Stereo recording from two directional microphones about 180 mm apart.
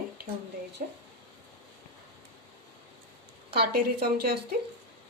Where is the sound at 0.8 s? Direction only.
50° right (ahead or behind).